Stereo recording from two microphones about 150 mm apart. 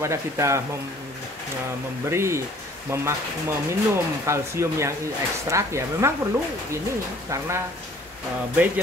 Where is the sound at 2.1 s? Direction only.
20° right (ahead or behind).